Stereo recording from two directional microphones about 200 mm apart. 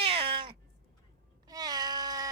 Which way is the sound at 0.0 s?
30° right (ahead or behind).